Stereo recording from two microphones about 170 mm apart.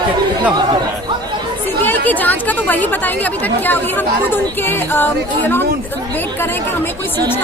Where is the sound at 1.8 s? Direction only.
10° left (ahead or behind).